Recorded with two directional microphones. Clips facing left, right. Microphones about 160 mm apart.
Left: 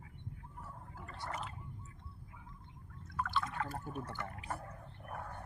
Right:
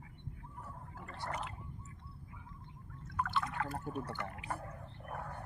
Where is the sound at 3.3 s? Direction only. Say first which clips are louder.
Left 1 dB; 15° right (ahead or behind).